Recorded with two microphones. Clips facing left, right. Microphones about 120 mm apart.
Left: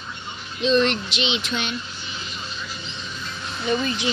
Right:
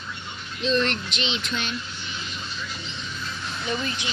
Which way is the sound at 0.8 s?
90° left.